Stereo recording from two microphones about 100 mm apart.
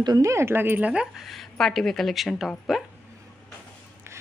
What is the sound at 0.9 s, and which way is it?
Speech, 10° right (ahead or behind).